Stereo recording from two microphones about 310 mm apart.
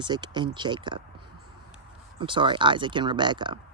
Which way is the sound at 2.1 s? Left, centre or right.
Centre.